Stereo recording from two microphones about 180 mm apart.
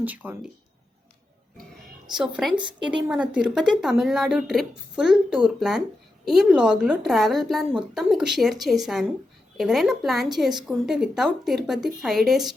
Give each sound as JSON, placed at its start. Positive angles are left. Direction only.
{"t": 0.0, "sound": "speech", "side_deg": -10}
{"t": 2.1, "sound": "speech", "side_deg": -5}
{"t": 2.6, "sound": "a woman's voice", "side_deg": -25}
{"t": 3.1, "sound": "speech", "side_deg": -5}